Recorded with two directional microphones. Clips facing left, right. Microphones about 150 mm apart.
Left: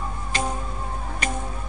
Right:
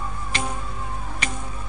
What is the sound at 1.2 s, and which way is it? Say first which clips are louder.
Music: left 3 dB; 45° left (ahead or behind).